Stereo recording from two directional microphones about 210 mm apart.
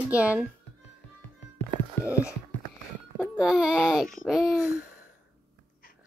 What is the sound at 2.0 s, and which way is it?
Speech, 15° left (ahead or behind).